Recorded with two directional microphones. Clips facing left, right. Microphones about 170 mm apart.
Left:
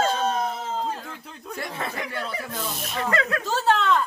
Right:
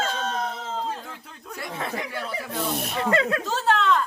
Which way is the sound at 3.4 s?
Centre (ahead or behind).